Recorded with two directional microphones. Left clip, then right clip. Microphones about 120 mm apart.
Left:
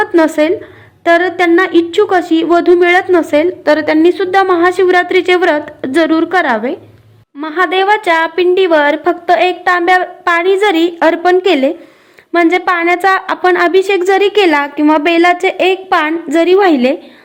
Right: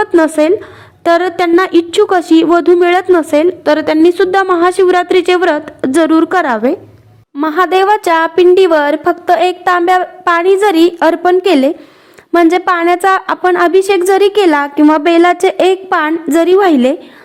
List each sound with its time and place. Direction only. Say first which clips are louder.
0.0 s a woman's voice: right 1 dB; 25° right (ahead or behind)